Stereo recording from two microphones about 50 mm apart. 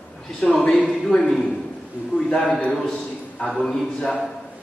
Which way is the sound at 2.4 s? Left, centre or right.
Left.